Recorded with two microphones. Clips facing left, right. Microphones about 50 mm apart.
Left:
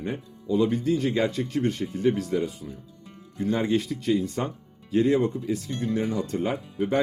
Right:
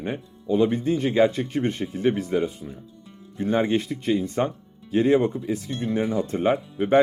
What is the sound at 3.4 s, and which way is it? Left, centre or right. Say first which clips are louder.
Speech: right 2 dB; right.